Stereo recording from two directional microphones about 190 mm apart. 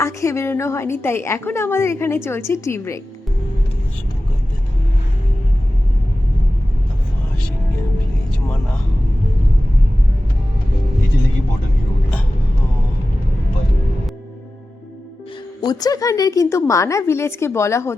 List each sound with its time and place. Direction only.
0.0 s a woman's voice: 15° left (ahead or behind)
15.6 s a woman's voice: 20° left (ahead or behind)